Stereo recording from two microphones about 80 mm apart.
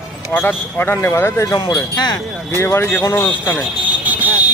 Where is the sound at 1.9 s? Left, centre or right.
Left.